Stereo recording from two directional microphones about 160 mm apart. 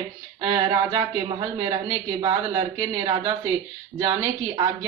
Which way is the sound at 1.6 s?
25° right (ahead or behind).